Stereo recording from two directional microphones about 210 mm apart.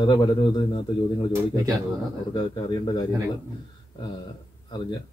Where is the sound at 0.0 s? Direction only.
20° left (ahead or behind).